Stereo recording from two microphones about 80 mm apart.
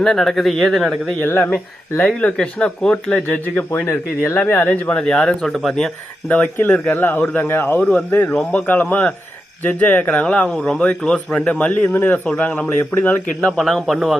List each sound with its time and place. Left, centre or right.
0.0 s speech: centre
1.2 s speech: left
3.8 s speech: left; by 5.9 s centre
6.2 s speech: centre
12.7 s speech: left
13.4 s speech: centre